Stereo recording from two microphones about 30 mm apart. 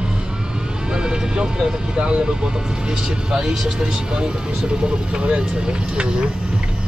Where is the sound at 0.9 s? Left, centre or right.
Right.